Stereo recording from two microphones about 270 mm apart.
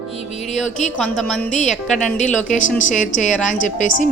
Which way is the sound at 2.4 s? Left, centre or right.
Left.